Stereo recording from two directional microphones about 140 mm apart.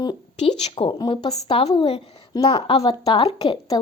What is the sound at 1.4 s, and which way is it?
Speech, 45° left (ahead or behind).